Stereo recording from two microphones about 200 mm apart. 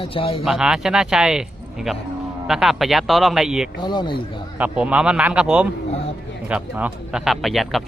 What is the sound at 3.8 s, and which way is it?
Speech, 20° left (ahead or behind).